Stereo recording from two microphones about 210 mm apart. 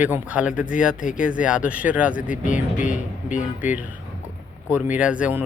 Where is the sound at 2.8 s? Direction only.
35° left (ahead or behind).